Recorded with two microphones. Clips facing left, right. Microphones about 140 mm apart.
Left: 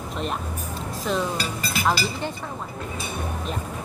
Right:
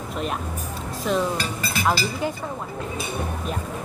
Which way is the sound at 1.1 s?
Centre (ahead or behind).